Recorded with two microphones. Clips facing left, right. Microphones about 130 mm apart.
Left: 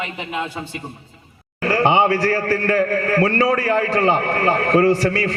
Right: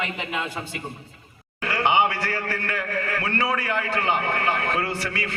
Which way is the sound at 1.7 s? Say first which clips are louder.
Left 5 dB; 40° left (ahead or behind).